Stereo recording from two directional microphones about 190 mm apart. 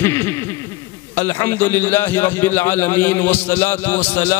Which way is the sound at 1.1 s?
15° left (ahead or behind).